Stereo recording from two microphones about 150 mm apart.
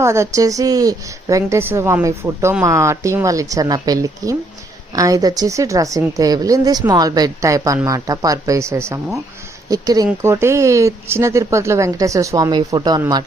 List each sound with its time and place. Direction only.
0.0 s a woman's voice: 20° right (ahead or behind)